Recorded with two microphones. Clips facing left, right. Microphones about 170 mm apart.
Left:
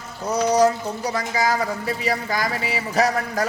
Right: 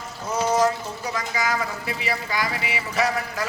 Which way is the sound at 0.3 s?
35° left (ahead or behind).